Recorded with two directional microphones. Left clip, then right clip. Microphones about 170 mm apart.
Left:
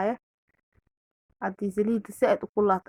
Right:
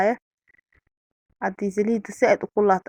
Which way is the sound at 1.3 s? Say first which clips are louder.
Right 4 dB; 25° right (ahead or behind).